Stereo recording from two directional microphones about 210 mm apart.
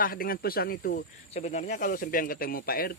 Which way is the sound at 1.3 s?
30° left (ahead or behind).